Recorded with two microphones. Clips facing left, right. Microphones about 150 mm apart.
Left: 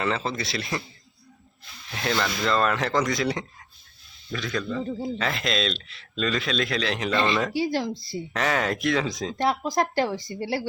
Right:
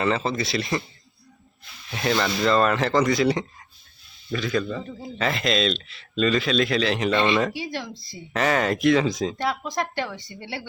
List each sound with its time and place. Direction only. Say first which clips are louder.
0.0 s speech: right 3 dB; centre (ahead or behind)
1.9 s speech: right 3 dB; 5° right (ahead or behind)
4.8 s speech: left 6 dB; 30° left (ahead or behind)
5.1 s speech: right 7 dB; centre (ahead or behind)
7.7 s speech: left 6 dB; 35° left (ahead or behind)
8.3 s speech: right 4 dB; centre (ahead or behind)
9.4 s speech: left 3 dB; 35° left (ahead or behind)